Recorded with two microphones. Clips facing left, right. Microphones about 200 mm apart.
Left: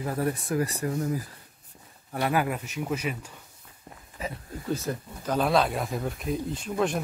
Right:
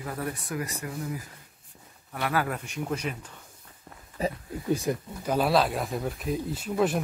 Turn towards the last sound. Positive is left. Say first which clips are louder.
# right 1 dB
turn(degrees=-5)  # may be behind; listen again after turning